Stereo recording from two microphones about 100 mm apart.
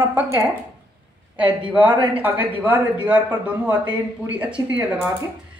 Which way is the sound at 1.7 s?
15° right (ahead or behind).